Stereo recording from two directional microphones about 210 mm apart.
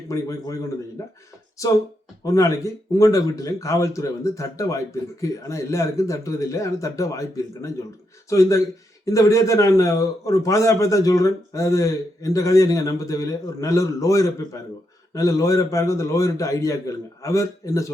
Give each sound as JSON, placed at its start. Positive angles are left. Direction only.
{"t": 0.1, "sound": "a man's voice", "side_deg": 15}